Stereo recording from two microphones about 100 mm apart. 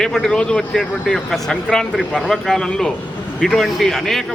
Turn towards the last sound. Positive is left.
turn(degrees=5)  # may be behind; listen again after turning